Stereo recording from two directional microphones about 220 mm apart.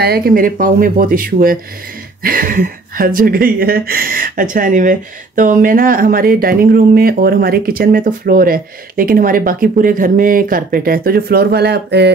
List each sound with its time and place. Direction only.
0.0 s speech: 45° right (ahead or behind)